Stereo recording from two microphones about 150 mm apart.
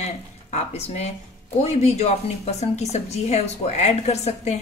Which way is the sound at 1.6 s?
45° left (ahead or behind).